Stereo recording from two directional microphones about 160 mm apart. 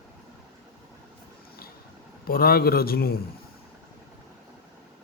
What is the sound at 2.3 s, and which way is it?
Speech, 65° left (ahead or behind).